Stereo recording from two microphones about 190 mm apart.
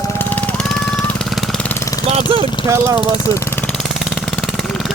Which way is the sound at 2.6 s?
15° right (ahead or behind).